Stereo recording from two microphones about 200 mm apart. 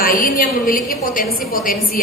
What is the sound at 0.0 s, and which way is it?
A woman's voice, 45° left (ahead or behind).